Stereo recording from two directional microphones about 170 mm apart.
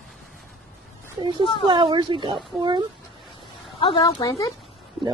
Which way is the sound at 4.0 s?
20° left (ahead or behind).